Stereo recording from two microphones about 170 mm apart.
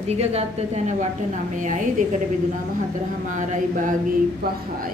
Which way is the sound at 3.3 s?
50° right (ahead or behind).